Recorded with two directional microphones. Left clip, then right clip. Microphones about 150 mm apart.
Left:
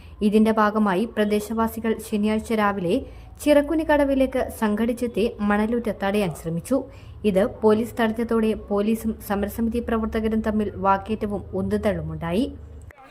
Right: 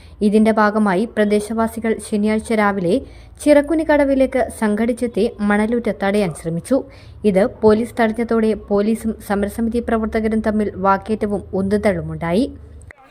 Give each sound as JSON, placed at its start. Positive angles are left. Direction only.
{"t": 0.2, "sound": "a woman's voice", "side_deg": -25}